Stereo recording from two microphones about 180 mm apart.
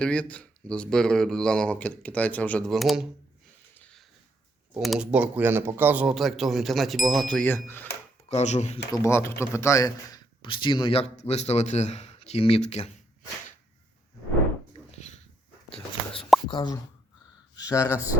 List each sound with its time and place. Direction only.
0.0 s speech: 5° left (ahead or behind)
3.8 s a sound: 5° left (ahead or behind)
4.8 s speech: 5° right (ahead or behind)
8.3 s speech: 40° left (ahead or behind)
8.9 s speech: 15° left (ahead or behind); by 12.9 s 35° left (ahead or behind)
16.5 s speech: 25° left (ahead or behind)